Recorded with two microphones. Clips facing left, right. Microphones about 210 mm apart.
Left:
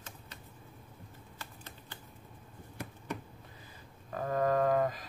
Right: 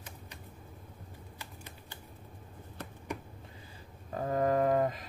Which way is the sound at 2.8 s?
10° left (ahead or behind).